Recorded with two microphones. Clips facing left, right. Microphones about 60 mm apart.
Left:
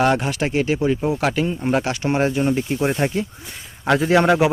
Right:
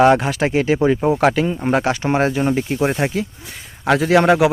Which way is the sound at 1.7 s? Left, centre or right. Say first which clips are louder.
Right 3 dB; right.